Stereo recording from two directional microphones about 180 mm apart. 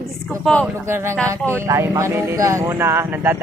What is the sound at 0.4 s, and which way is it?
Speech, 5° left (ahead or behind).